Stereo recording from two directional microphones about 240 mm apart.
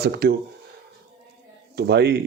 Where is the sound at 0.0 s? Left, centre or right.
Right.